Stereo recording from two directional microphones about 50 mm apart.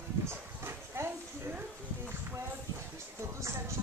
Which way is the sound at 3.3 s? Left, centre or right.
Right.